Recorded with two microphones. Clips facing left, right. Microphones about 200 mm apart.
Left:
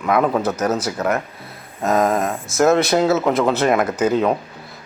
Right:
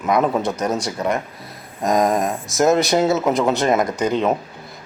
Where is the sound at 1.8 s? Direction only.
15° right (ahead or behind).